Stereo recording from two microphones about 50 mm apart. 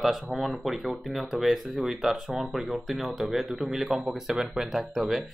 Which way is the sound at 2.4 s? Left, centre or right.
Centre.